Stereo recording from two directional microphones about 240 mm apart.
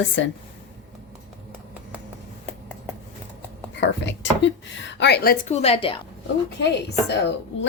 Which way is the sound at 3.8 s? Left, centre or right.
Left.